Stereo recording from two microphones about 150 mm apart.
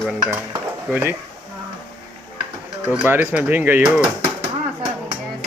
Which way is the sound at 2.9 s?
10° right (ahead or behind).